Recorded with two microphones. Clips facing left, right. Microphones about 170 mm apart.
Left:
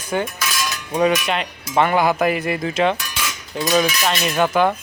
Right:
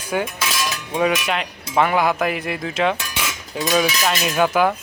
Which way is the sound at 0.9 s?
5° right (ahead or behind).